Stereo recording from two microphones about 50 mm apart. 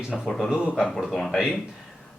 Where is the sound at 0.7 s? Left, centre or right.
Centre.